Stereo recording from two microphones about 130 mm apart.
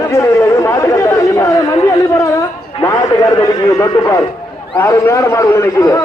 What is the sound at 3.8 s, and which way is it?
A man's voice, 20° left (ahead or behind).